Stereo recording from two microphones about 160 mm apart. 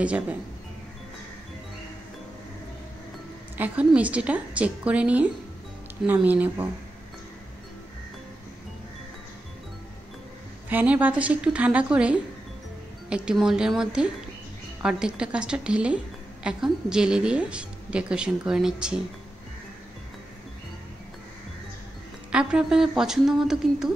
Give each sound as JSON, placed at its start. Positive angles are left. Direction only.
{"t": 0.0, "sound": "a woman's voice", "side_deg": -10}
{"t": 3.5, "sound": "a woman's voice", "side_deg": -10}
{"t": 10.7, "sound": "a woman's voice", "side_deg": -10}
{"t": 22.3, "sound": "a woman's voice", "side_deg": -5}